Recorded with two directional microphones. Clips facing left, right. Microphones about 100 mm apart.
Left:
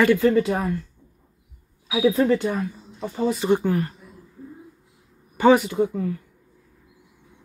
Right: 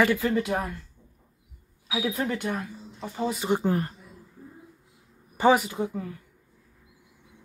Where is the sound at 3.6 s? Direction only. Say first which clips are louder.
Left 3 dB; 35° right (ahead or behind).